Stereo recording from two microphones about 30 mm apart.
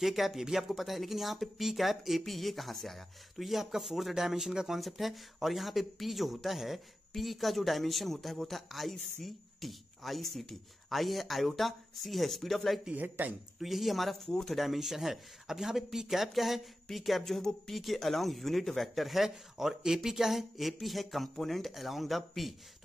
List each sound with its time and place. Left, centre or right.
0.0 s speech: centre
0.7 s speech: centre
3.4 s speech: centre
4.7 s speech: centre
12.9 s a man's voice: right
13.6 s speech: centre
14.2 s speech: centre
14.5 s speech: centre
17.2 s speech: centre
17.7 s speech: centre
19.2 s speech: centre